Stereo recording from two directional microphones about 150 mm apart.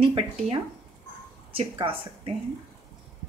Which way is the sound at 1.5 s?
35° right (ahead or behind).